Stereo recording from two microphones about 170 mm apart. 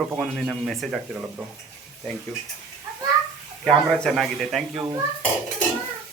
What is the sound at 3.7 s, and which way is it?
A man's voice, 5° left (ahead or behind).